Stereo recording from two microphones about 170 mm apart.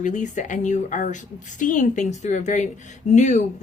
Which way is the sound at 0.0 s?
45° left (ahead or behind).